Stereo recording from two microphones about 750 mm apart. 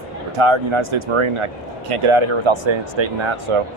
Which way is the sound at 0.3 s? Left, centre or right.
Right.